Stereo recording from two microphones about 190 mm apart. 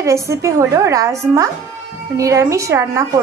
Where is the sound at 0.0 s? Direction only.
15° right (ahead or behind).